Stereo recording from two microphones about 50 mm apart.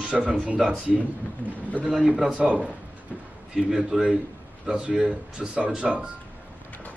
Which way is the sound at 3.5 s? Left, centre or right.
Centre.